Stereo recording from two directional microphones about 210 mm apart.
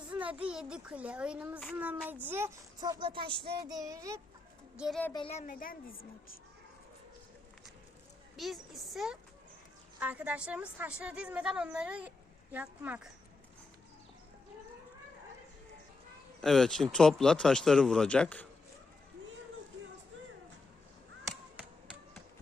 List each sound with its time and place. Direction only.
0.1 s a sound: 5° right (ahead or behind)
0.4 s a woman's voice: 5° right (ahead or behind)
1.7 s child singing: 10° right (ahead or behind)
2.2 s speech: 10° right (ahead or behind)
3.7 s child singing: 15° right (ahead or behind)
4.8 s a woman's voice: 5° left (ahead or behind)
5.1 s a woman's voice: 30° left (ahead or behind); by 6.3 s 45° left (ahead or behind)
8.4 s a woman's voice: centre (ahead or behind)
16.4 s a woman's voice: centre (ahead or behind)